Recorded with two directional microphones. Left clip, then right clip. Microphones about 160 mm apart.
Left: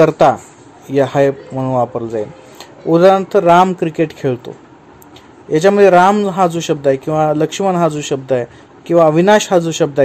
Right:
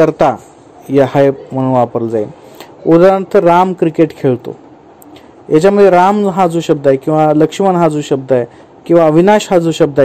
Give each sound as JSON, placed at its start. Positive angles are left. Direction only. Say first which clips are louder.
{"t": 0.0, "sound": "a man's voice", "louder": "even", "side_deg": -15}
{"t": 5.5, "sound": "a man's voice", "louder": "right 2 dB", "side_deg": -10}